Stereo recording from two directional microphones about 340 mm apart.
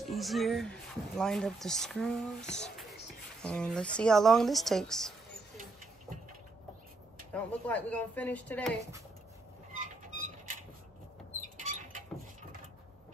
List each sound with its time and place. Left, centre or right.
0.0 s speech: centre
7.3 s speech: centre
10.0 s a sound: right
11.6 s rodents: right